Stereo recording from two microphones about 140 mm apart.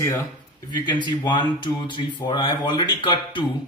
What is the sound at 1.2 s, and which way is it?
Speech, 35° left (ahead or behind).